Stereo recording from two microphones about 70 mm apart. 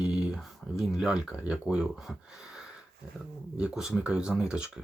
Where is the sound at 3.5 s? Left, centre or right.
Centre.